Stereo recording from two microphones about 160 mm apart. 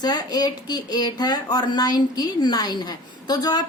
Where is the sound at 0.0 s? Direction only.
25° left (ahead or behind).